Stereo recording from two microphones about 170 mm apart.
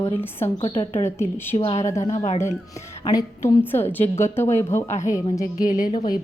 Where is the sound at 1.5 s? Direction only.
35° left (ahead or behind).